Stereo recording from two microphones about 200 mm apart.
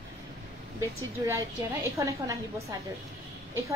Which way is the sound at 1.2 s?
15° right (ahead or behind).